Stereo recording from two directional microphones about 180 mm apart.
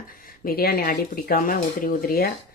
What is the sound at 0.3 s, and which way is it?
Speech, 55° left (ahead or behind).